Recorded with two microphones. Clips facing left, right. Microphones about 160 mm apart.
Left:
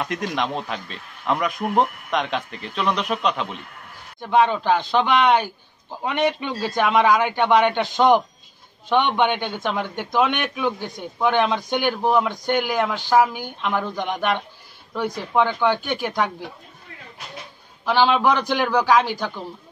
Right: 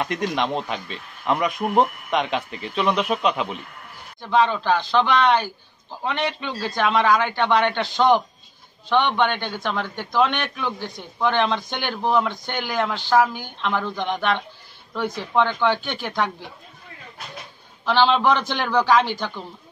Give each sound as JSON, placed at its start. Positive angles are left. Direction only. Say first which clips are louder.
{"t": 0.0, "sound": "a man's voice", "louder": "right 1 dB", "side_deg": 0}
{"t": 4.2, "sound": "a man's voice", "louder": "left 1 dB", "side_deg": 15}
{"t": 17.8, "sound": "a man's voice", "louder": "even", "side_deg": 10}